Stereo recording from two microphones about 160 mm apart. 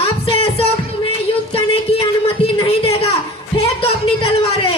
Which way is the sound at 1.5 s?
35° left (ahead or behind).